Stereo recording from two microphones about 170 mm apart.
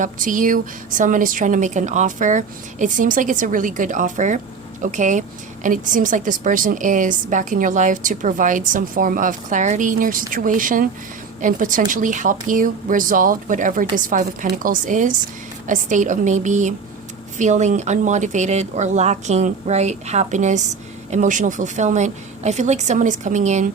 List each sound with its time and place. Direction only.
0.0 s a woman's voice: 50° right (ahead or behind)